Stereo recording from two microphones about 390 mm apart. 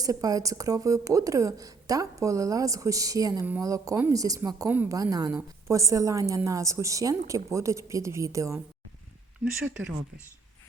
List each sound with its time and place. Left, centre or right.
0.0 s speech: centre